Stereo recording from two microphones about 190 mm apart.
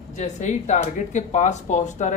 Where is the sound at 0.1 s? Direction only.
40° left (ahead or behind).